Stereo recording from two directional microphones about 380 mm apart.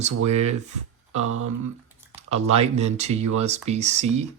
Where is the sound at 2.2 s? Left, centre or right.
Centre.